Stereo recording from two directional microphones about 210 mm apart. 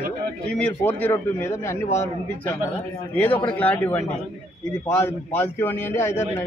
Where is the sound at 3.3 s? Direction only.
25° left (ahead or behind).